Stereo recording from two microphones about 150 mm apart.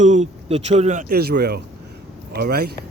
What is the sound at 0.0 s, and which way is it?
Speech, 50° right (ahead or behind).